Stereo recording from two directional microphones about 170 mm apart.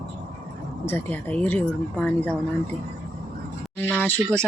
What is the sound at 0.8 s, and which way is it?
Speech, 10° left (ahead or behind).